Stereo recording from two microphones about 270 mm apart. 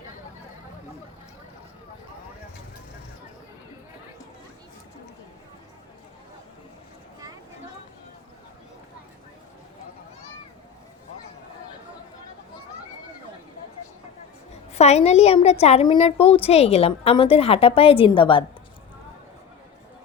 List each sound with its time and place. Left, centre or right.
14.5 s a woman's voice: left